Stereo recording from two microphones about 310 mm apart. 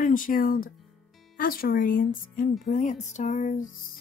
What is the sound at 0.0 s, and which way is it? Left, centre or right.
Speech, left.